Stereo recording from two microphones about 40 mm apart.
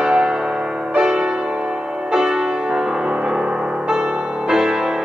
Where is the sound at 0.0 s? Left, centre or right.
Centre.